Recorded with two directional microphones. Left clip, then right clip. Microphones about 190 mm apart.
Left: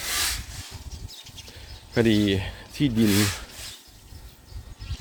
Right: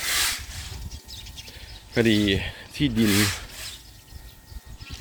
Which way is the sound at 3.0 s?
35° left (ahead or behind).